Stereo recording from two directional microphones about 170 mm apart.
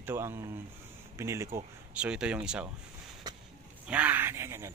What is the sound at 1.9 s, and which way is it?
Speech, 5° right (ahead or behind).